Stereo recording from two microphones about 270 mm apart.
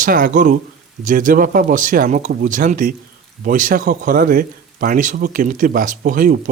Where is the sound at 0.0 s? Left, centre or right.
Right.